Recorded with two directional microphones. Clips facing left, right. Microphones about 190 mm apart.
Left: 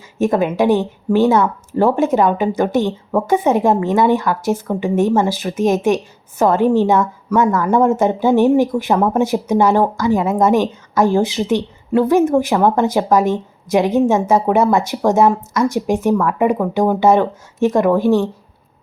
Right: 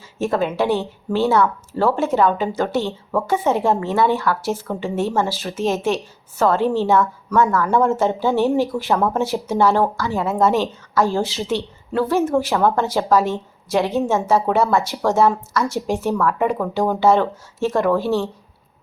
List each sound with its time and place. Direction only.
0.2 s a woman's voice: 15° left (ahead or behind)